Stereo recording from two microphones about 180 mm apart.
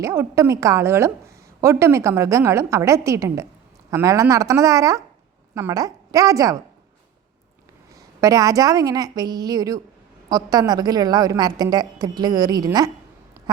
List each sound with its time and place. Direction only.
0.0 s a woman's voice: 15° right (ahead or behind)
7.9 s a woman's voice: 20° right (ahead or behind)